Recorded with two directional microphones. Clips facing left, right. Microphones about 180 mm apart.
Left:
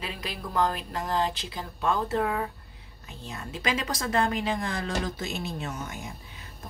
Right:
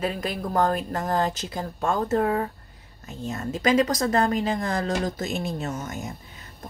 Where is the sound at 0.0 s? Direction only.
45° right (ahead or behind).